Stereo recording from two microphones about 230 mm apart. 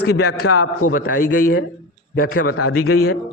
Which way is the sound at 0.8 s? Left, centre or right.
Left.